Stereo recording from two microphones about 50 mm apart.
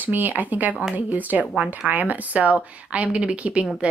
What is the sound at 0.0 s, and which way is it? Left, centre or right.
Speech, right.